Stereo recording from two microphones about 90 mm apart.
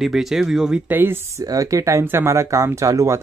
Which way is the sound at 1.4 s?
40° right (ahead or behind).